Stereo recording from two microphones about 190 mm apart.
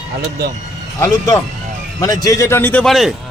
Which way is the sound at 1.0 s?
20° left (ahead or behind).